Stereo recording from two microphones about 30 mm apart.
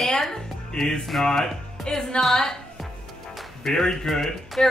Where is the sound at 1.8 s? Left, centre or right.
Centre.